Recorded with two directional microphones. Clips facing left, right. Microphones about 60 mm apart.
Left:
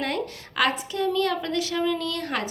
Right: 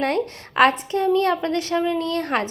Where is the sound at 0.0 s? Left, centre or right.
Right.